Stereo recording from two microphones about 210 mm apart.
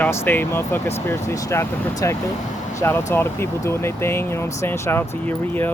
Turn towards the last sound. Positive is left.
turn(degrees=10)  # may be behind; listen again after turning